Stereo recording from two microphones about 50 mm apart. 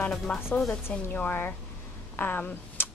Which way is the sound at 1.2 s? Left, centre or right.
Left.